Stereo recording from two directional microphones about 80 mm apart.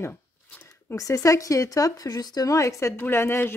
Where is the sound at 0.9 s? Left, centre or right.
Left.